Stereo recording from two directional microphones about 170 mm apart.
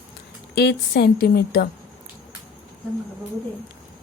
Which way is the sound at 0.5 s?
75° left (ahead or behind).